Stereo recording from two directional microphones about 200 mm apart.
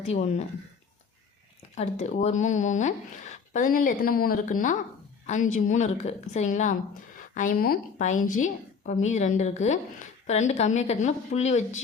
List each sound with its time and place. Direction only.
0.1 s speech: 30° left (ahead or behind)
1.7 s speech: 35° left (ahead or behind)